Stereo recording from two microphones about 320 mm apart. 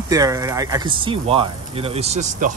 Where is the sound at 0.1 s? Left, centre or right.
Centre.